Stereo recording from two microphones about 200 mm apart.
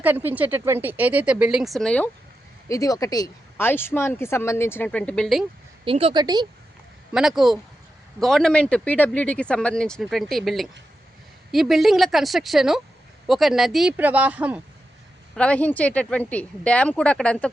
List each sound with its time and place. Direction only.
0.0 s speech: 10° right (ahead or behind)
2.6 s speech: 15° left (ahead or behind); by 5.5 s centre (ahead or behind)
5.8 s a woman's voice: 30° right (ahead or behind)
7.1 s speech: centre (ahead or behind)
15.4 s speech: 5° left (ahead or behind)